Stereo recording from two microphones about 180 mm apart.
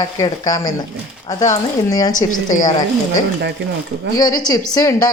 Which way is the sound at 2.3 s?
50° left (ahead or behind).